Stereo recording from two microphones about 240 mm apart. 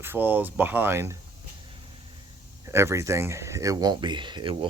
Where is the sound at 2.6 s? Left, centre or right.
Centre.